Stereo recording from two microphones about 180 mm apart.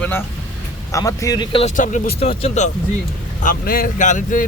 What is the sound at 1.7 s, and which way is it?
Speech, 45° left (ahead or behind).